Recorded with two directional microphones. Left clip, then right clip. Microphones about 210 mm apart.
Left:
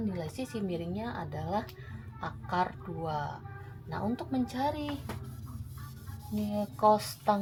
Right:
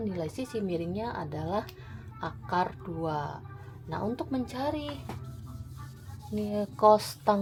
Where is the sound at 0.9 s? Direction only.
55° right (ahead or behind).